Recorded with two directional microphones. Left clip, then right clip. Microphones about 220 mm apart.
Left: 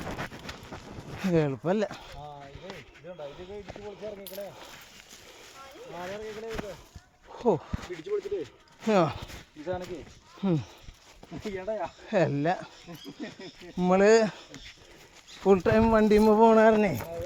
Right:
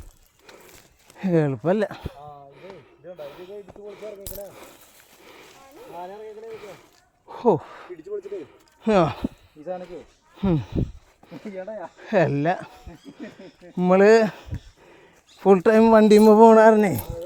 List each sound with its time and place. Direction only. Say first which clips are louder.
1.3 s speech: right 5 dB; 45° right (ahead or behind)
3.2 s speech: right 3 dB; 40° right (ahead or behind)
7.3 s speech: right 6 dB; 45° right (ahead or behind)
8.9 s speech: right 5 dB; 40° right (ahead or behind)
10.4 s speech: right 5 dB; 40° right (ahead or behind)
12.0 s speech: right 6 dB; 45° right (ahead or behind)
13.7 s speech: right 6 dB; 45° right (ahead or behind)
15.4 s speech: right 7 dB; 50° right (ahead or behind)